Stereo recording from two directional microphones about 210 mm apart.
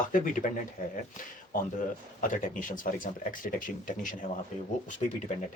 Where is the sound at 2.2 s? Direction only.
40° left (ahead or behind).